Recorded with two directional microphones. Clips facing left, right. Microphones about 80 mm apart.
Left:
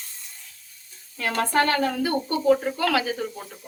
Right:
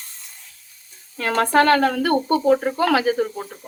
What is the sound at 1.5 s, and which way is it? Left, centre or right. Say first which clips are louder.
Speech: right 7 dB; right.